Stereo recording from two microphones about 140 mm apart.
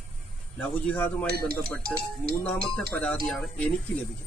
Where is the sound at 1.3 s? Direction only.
90° right.